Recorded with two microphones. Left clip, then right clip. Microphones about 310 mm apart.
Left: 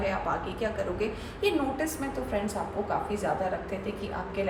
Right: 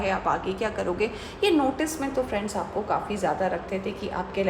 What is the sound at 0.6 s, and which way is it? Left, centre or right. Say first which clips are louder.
A woman's voice: right 4 dB; right.